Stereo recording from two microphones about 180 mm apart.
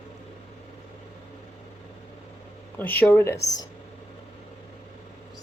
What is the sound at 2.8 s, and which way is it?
Speech, 10° left (ahead or behind).